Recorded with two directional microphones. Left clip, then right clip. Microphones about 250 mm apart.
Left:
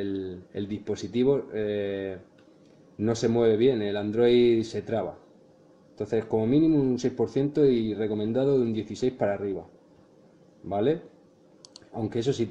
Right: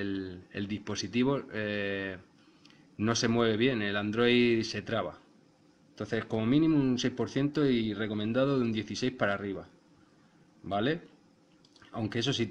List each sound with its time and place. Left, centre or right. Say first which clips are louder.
0.0 s speech: left 4 dB; right
10.7 s speech: left 5 dB; right